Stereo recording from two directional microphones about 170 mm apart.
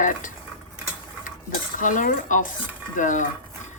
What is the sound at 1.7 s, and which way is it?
Speech, 50° left (ahead or behind).